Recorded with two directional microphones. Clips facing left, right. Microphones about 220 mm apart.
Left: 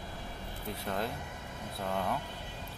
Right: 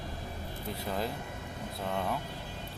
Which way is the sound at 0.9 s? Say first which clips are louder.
Right 1 dB; centre (ahead or behind).